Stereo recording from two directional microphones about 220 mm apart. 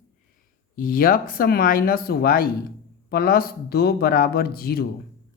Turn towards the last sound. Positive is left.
turn(degrees=45)  # may be behind; listen again after turning